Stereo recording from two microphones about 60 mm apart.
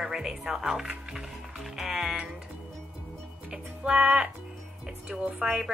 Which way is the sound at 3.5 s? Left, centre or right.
Centre.